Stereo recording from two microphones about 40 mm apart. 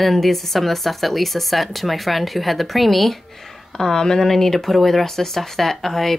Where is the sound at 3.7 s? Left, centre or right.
Centre.